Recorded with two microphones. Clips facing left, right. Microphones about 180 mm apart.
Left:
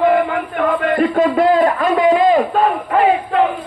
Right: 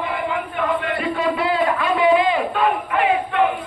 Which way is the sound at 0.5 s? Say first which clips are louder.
Left 9 dB; 50° left (ahead or behind).